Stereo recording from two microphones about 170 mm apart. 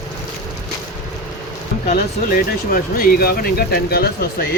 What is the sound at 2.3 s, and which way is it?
Speech, 60° left (ahead or behind).